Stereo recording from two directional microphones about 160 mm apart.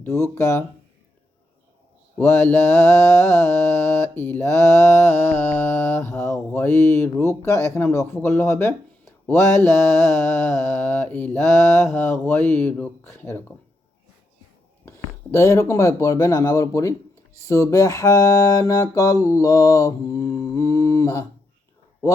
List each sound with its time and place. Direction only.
0.0 s mantra: 15° left (ahead or behind)
2.1 s mantra: 10° left (ahead or behind)
14.8 s speech: 15° left (ahead or behind)
17.5 s mantra: 20° left (ahead or behind)